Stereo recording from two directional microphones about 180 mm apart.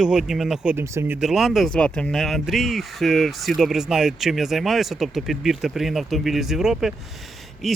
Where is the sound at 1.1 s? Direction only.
Centre (ahead or behind).